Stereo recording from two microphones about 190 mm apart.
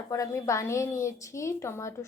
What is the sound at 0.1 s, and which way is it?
A woman's voice, 15° left (ahead or behind).